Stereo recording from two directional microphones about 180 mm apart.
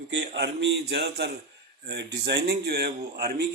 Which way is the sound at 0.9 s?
65° right (ahead or behind).